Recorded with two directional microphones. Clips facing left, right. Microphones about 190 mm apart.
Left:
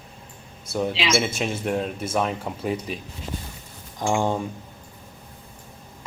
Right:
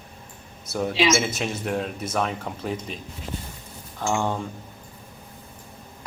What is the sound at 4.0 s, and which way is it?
Speech, 15° left (ahead or behind).